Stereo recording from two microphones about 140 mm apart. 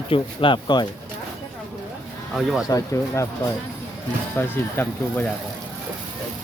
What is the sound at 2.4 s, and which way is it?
Speech, centre (ahead or behind).